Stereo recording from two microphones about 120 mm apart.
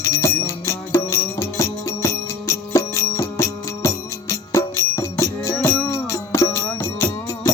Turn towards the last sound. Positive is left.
turn(degrees=25)  # may be behind; listen again after turning